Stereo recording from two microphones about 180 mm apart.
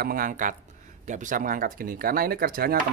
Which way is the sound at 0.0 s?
50° right (ahead or behind).